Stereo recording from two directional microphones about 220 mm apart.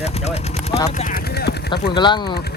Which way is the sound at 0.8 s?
35° left (ahead or behind).